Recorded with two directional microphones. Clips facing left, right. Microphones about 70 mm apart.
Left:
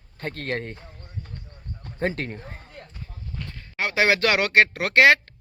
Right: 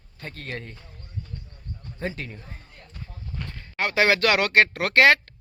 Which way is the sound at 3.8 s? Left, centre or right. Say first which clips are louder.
Even; centre.